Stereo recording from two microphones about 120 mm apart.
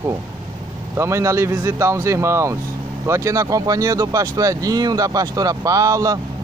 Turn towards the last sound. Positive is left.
turn(degrees=-30)  # may be behind; listen again after turning